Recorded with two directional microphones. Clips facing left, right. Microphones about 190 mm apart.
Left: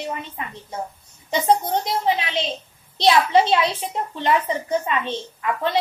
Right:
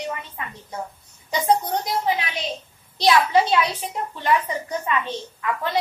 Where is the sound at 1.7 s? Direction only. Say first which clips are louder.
Left 2 dB; 25° left (ahead or behind).